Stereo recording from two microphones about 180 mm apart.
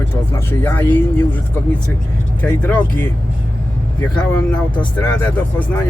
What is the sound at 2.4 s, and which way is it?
Speech, 10° left (ahead or behind).